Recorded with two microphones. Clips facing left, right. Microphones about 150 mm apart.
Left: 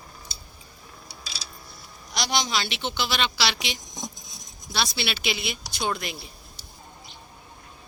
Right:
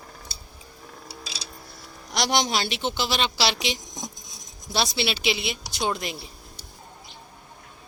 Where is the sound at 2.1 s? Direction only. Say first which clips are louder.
Right 3 dB; 60° right (ahead or behind); by 3.8 s 35° right (ahead or behind).